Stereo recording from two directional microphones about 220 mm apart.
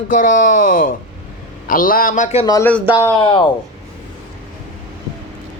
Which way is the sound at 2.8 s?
10° right (ahead or behind).